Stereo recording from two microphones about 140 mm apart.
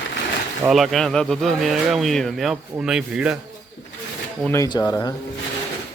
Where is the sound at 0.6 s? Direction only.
Centre (ahead or behind).